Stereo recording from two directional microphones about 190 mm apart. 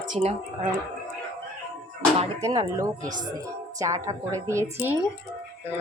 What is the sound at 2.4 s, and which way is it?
A woman's voice, 20° right (ahead or behind).